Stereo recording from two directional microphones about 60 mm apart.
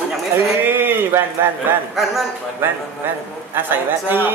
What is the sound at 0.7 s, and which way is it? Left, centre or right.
Speech, right.